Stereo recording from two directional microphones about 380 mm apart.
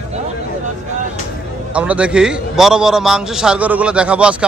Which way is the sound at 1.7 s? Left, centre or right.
Centre.